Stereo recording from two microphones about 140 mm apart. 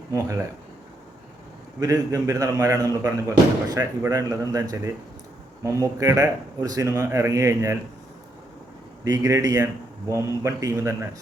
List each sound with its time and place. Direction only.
1.8 s a man's voice: 25° right (ahead or behind)
9.0 s a man's voice: 25° right (ahead or behind)